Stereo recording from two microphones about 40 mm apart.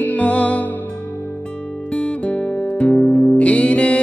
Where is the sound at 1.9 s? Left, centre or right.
Left.